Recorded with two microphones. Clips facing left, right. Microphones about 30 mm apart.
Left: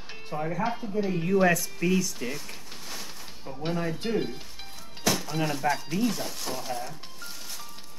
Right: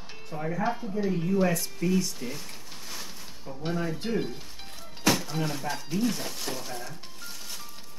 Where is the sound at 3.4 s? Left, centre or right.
Centre.